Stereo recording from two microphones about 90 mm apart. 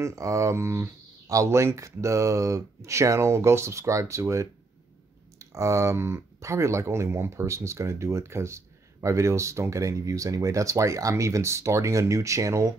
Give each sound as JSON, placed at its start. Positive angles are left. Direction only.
{"t": 0.0, "sound": "speech", "side_deg": -35}